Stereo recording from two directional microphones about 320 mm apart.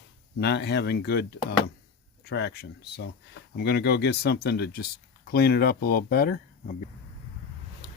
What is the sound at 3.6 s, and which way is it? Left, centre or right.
Speech, left.